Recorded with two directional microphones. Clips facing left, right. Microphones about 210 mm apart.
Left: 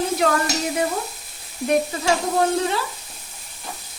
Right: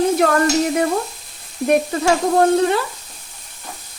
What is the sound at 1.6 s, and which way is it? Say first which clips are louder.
Speech: right 4 dB; 55° right (ahead or behind).